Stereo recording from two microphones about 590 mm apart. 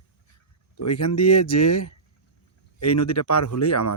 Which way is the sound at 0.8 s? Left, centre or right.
Left.